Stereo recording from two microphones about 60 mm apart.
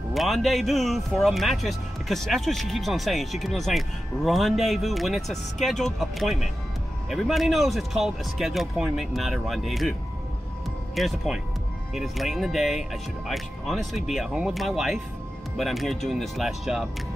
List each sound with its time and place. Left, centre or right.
0.1 s speech: centre
11.0 s speech: centre